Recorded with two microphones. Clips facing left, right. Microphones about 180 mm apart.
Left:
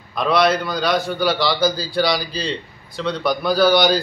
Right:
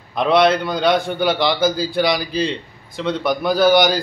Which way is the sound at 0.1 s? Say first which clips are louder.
Right 2 dB; 25° right (ahead or behind).